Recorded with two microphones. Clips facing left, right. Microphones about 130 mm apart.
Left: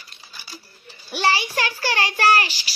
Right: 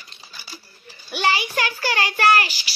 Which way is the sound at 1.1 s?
35° left (ahead or behind).